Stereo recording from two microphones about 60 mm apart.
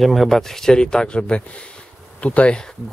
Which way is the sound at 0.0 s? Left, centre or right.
Centre.